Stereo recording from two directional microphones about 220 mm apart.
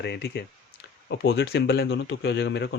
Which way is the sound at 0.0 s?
50° left (ahead or behind).